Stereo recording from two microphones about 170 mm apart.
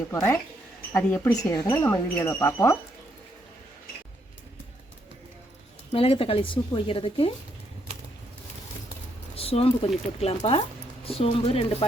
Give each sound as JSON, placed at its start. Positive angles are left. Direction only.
{"t": 0.1, "sound": "speech", "side_deg": 15}
{"t": 5.9, "sound": "speech", "side_deg": 35}
{"t": 9.3, "sound": "speech", "side_deg": 35}